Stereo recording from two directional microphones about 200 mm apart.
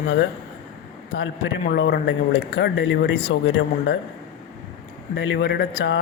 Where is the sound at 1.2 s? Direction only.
60° left (ahead or behind).